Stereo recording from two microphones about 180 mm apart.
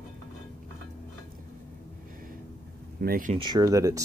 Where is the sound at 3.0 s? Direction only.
50° right (ahead or behind).